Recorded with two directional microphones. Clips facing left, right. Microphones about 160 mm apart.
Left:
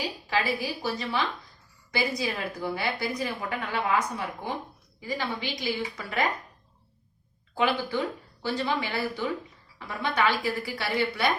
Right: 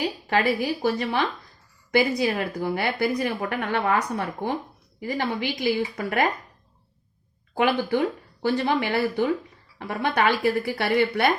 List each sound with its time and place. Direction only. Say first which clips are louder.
0.3 s a woman's voice: right 5 dB; 55° right (ahead or behind)
7.5 s speech: right 4 dB; 55° right (ahead or behind)